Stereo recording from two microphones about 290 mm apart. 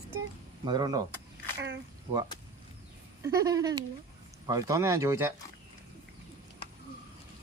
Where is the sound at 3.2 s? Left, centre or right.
Centre.